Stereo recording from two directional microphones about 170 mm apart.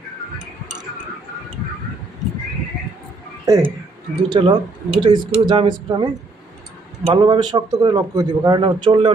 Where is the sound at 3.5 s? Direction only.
10° right (ahead or behind).